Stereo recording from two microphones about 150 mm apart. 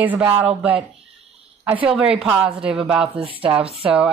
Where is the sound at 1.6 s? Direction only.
10° right (ahead or behind).